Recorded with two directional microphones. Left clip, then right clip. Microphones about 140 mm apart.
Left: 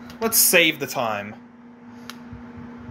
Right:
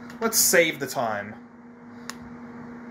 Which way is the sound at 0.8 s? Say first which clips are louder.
Left 2 dB; 20° left (ahead or behind).